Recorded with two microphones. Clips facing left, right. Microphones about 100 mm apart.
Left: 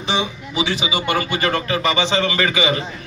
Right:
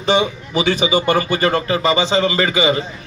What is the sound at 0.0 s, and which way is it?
Speech, 45° right (ahead or behind).